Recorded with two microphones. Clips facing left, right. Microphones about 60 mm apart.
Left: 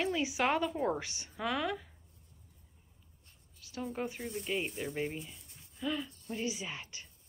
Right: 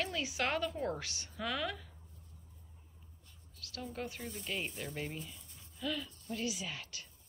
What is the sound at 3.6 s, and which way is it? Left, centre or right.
A woman's voice, centre.